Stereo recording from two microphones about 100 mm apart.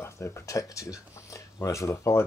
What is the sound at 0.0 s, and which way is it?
Speech, 25° left (ahead or behind).